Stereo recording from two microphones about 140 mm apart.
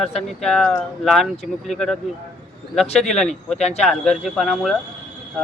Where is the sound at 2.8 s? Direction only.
50° left (ahead or behind).